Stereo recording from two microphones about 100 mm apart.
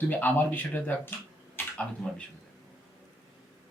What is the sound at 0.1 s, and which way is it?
Speech, 15° left (ahead or behind).